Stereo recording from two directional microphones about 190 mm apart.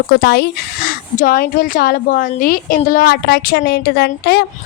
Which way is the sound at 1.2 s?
50° left (ahead or behind).